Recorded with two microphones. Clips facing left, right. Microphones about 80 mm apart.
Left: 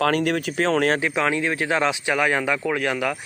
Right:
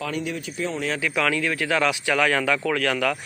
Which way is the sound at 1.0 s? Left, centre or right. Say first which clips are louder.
Left 1 dB; left.